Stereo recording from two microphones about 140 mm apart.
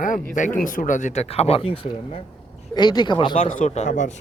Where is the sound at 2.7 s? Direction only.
30° left (ahead or behind).